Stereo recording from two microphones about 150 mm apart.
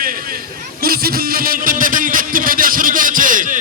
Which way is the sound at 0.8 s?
85° right.